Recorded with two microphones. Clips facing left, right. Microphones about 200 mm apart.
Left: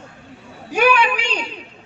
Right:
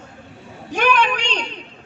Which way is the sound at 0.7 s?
10° left (ahead or behind).